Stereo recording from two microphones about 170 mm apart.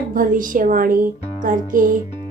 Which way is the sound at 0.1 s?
50° right (ahead or behind).